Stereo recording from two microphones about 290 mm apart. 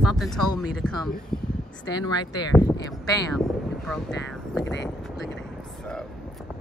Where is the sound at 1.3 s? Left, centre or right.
Centre.